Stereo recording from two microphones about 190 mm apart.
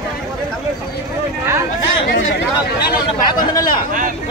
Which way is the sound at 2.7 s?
55° left (ahead or behind).